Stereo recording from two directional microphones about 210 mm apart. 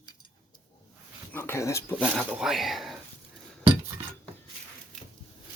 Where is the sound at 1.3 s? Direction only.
10° left (ahead or behind).